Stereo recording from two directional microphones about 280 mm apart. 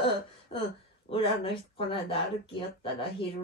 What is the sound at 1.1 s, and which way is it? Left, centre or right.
Speech, centre.